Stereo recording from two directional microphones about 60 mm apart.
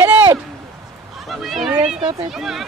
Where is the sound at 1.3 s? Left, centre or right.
Centre.